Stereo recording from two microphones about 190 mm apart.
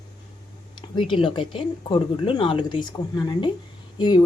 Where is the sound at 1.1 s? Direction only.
25° left (ahead or behind).